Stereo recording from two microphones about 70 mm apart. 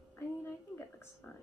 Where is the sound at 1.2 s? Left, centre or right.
Left.